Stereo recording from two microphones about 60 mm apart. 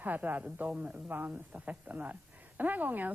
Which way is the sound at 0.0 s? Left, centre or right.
Right.